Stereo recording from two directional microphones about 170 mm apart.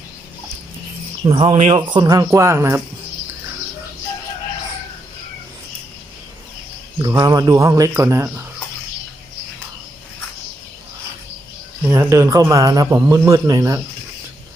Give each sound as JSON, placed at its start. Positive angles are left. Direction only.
{"t": 1.2, "sound": "speech", "side_deg": -30}
{"t": 1.9, "sound": "speech", "side_deg": -25}
{"t": 7.0, "sound": "a man's voice", "side_deg": -20}
{"t": 11.9, "sound": "a man's voice", "side_deg": -15}